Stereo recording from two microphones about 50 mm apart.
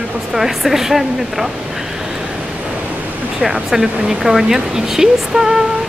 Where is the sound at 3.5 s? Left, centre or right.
Centre.